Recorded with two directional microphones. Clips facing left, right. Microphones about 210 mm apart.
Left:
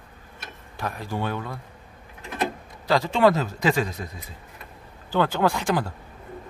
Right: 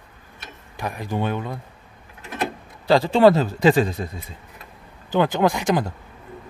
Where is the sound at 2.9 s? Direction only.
30° right (ahead or behind).